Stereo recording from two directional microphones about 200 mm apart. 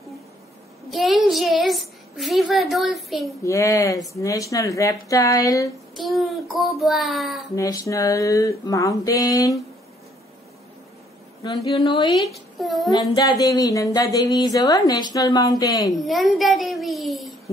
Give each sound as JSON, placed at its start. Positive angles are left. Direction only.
{"t": 0.8, "sound": "a child's voice", "side_deg": 0}
{"t": 3.4, "sound": "a woman's voice", "side_deg": 15}
{"t": 5.9, "sound": "a child's voice", "side_deg": 0}
{"t": 7.5, "sound": "a woman's voice", "side_deg": 15}
{"t": 11.4, "sound": "a woman's voice", "side_deg": 30}
{"t": 12.3, "sound": "speech", "side_deg": 0}
{"t": 13.1, "sound": "a woman's voice", "side_deg": 20}
{"t": 15.9, "sound": "a child's voice", "side_deg": 0}